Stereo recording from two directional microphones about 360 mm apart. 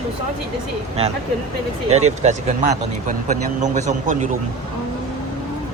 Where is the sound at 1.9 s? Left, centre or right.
Centre.